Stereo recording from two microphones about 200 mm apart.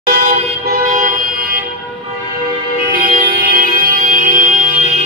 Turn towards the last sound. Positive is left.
turn(degrees=-40)  # may be behind; listen again after turning